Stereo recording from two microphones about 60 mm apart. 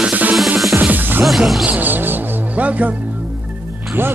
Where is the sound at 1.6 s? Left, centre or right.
Right.